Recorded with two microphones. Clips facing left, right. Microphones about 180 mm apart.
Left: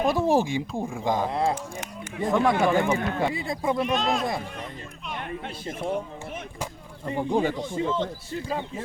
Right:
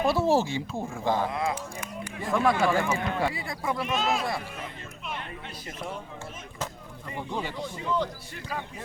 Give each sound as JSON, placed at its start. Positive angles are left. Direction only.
{"t": 0.0, "sound": "speech", "side_deg": 15}
{"t": 1.3, "sound": "speech", "side_deg": 35}
{"t": 2.2, "sound": "speech", "side_deg": 20}
{"t": 3.8, "sound": "speech", "side_deg": 0}
{"t": 7.0, "sound": "speech", "side_deg": 45}
{"t": 7.5, "sound": "speech", "side_deg": 20}